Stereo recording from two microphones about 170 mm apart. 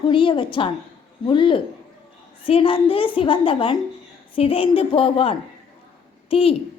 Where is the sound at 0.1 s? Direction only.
30° left (ahead or behind).